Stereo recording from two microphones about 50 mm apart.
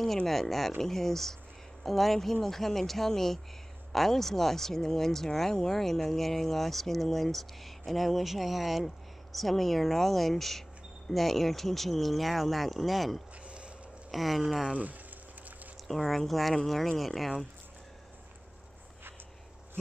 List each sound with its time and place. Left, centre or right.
0.3 s speech: centre
14.8 s a sound: right
15.9 s speech: centre